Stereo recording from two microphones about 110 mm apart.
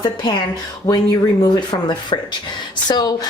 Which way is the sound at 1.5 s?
45° left (ahead or behind).